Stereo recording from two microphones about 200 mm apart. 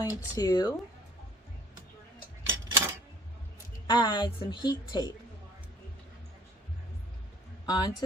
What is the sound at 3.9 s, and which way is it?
A woman's voice, 20° left (ahead or behind).